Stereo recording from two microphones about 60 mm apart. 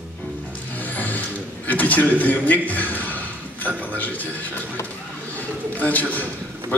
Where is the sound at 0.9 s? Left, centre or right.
Left.